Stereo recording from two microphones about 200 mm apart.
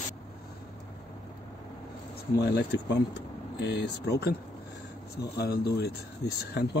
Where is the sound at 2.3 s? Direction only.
55° left (ahead or behind).